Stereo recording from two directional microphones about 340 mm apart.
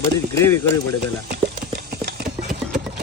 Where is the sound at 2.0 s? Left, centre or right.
Right.